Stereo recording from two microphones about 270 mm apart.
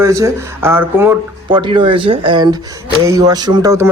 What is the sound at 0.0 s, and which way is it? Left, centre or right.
A man's voice, centre.